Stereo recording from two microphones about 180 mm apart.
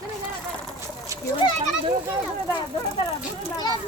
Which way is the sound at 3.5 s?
25° left (ahead or behind).